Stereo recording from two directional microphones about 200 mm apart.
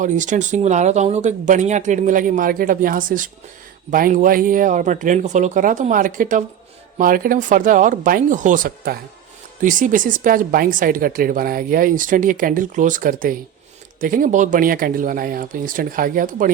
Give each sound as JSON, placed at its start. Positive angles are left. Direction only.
{"t": 0.0, "sound": "speech", "side_deg": -40}